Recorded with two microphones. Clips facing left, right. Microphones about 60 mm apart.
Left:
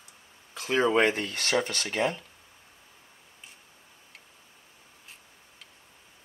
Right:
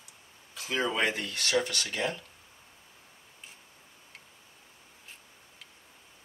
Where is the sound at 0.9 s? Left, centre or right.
Left.